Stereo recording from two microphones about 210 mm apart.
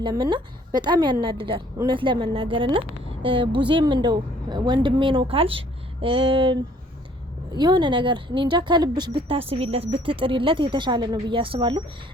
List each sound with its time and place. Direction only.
0.0 s a woman's voice: 20° right (ahead or behind)